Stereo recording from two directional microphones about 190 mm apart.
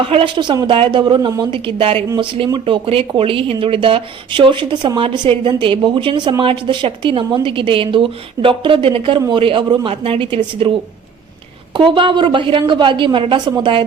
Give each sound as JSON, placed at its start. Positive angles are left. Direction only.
{"t": 0.0, "sound": "speech", "side_deg": -30}